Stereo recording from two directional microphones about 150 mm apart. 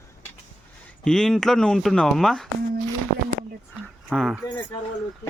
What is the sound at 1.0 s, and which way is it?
Speech, 5° left (ahead or behind).